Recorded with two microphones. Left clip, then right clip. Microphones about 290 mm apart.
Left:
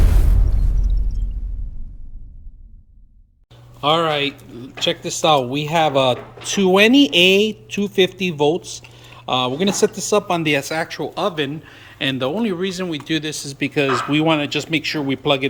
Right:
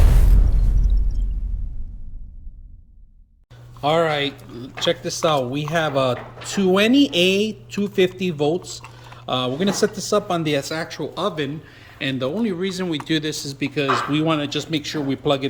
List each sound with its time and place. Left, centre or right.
3.8 s speech: centre